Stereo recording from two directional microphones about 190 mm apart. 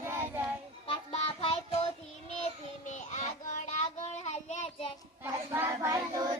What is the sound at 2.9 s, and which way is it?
Child singing, 40° left (ahead or behind).